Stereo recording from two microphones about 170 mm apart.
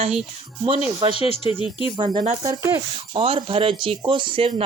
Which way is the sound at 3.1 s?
35° right (ahead or behind).